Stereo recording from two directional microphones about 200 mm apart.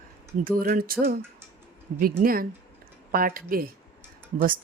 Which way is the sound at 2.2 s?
45° right (ahead or behind).